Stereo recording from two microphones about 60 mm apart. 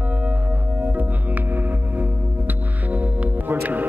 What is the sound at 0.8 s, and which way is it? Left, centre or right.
Music, right.